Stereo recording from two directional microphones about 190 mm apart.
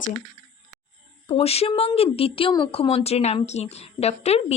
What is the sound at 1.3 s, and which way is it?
Speech, 30° left (ahead or behind).